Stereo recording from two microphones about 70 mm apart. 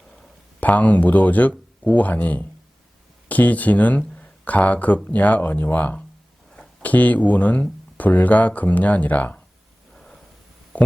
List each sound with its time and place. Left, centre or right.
0.6 s speech: left
9.9 s snort: centre
10.7 s speech: left